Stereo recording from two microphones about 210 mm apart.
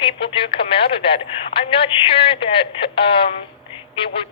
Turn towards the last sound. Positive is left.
turn(degrees=25)  # may be behind; listen again after turning